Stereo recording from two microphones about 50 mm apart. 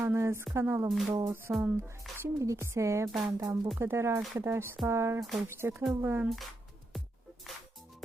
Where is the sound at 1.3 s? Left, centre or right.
Right.